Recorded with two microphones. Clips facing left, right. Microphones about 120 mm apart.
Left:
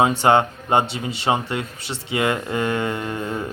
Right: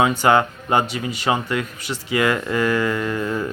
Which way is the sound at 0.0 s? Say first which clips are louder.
Even; 30° left (ahead or behind).